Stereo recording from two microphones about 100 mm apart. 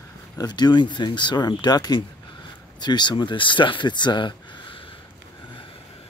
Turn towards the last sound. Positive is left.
turn(degrees=50)  # may be behind; listen again after turning